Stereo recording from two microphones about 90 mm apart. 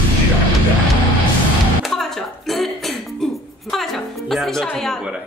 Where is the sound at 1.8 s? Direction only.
5° left (ahead or behind).